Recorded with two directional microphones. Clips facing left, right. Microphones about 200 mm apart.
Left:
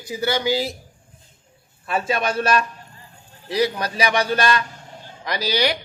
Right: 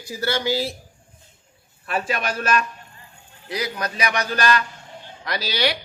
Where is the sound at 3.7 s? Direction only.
30° left (ahead or behind).